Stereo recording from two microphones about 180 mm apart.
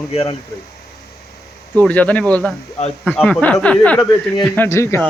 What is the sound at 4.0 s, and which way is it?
Speech, 25° left (ahead or behind).